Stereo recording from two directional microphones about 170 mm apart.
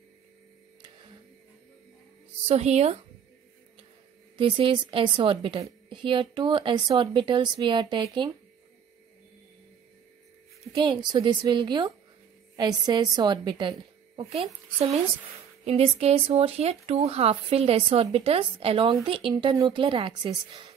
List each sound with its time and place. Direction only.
2.4 s speech: 40° right (ahead or behind)
4.4 s speech: 30° right (ahead or behind)
10.7 s speech: 25° right (ahead or behind)